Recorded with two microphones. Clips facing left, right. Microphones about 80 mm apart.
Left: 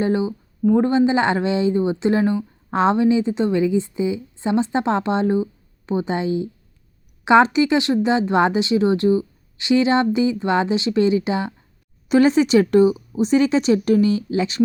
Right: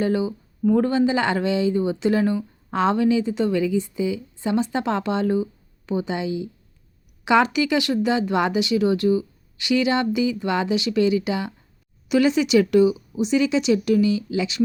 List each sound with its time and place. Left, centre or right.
0.0 s speech: left